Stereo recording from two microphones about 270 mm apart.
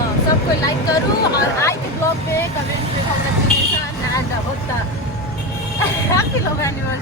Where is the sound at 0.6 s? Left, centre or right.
Centre.